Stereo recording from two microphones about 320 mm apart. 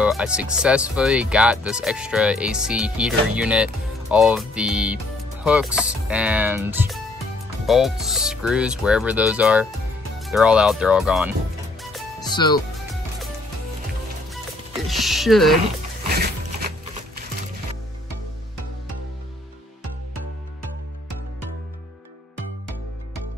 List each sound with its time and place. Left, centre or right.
0.0 s speech: centre
12.2 s music: centre
14.9 s speech: centre
15.6 s shuffling cards: right